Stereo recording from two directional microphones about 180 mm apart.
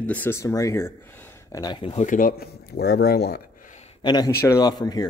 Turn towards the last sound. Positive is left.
turn(degrees=20)  # may be behind; listen again after turning